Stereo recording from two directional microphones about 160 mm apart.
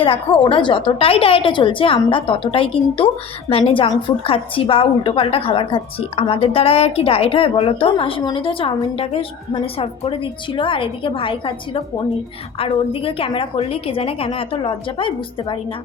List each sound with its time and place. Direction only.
0.0 s a woman's voice: 35° left (ahead or behind)